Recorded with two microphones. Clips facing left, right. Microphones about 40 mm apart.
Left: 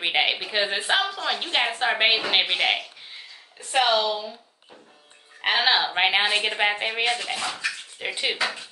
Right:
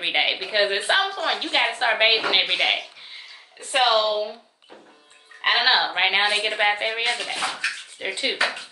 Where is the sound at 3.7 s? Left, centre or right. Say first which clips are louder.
Right 2 dB; right.